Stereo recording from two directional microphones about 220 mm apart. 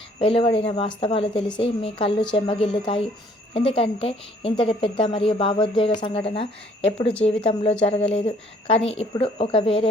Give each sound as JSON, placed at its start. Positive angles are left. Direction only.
{"t": 0.2, "sound": "a woman's voice", "side_deg": 25}